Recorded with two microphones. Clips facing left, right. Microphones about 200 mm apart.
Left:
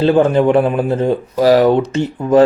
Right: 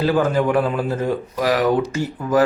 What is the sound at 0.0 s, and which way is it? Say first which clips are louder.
Speech: left 6 dB; 25° left (ahead or behind).